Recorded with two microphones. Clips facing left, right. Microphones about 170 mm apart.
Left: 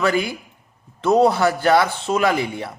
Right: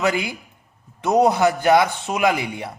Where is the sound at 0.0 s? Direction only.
20° right (ahead or behind).